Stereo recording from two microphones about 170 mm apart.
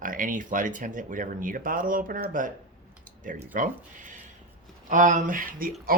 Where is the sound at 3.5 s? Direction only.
50° right (ahead or behind).